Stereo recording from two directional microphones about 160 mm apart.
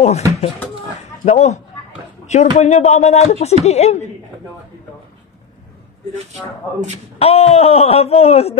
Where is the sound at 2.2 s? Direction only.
45° left (ahead or behind).